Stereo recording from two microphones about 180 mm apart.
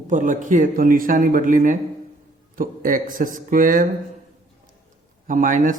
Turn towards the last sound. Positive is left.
turn(degrees=-45)  # may be behind; listen again after turning